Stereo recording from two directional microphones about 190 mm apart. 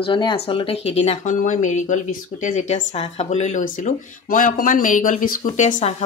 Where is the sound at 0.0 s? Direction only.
25° left (ahead or behind).